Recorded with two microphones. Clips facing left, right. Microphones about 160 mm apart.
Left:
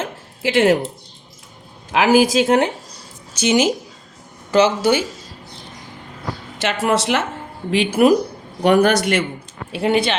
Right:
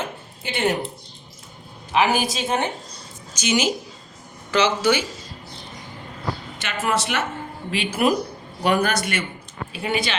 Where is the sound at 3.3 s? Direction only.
55° left (ahead or behind).